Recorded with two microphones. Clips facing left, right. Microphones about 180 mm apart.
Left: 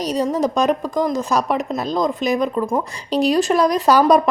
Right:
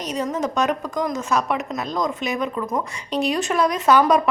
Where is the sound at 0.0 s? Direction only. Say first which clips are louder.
Left 5 dB; 35° left (ahead or behind).